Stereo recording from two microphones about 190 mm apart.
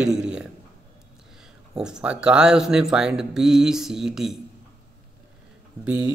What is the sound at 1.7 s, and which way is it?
Speech, 5° right (ahead or behind).